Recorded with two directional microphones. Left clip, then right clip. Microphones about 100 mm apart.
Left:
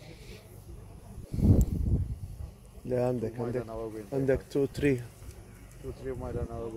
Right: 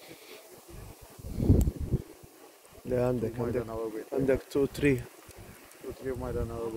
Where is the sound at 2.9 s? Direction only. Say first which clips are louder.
Right 1 dB; 40° left (ahead or behind).